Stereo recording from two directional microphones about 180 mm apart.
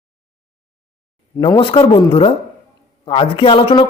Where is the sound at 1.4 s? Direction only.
30° left (ahead or behind).